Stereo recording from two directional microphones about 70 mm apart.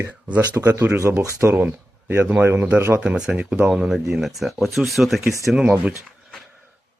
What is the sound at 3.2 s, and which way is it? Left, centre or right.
Speech, right.